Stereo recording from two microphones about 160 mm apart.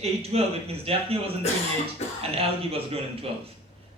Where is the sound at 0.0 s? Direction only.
40° right (ahead or behind).